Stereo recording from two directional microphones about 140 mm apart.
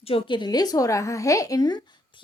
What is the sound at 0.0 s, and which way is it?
A woman's voice, 40° left (ahead or behind).